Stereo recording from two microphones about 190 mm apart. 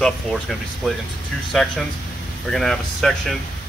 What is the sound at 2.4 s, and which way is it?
Speech, centre (ahead or behind).